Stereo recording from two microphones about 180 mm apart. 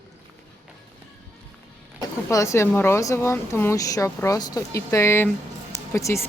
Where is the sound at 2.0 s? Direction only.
15° left (ahead or behind).